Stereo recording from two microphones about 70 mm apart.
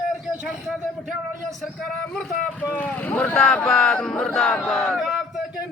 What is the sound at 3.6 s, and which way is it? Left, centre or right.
Speech, centre.